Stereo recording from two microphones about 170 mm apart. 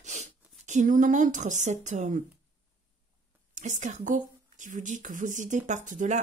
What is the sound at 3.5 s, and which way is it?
Speech, 45° right (ahead or behind).